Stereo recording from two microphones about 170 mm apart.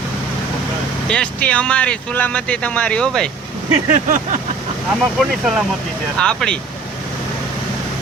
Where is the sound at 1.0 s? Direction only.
5° left (ahead or behind).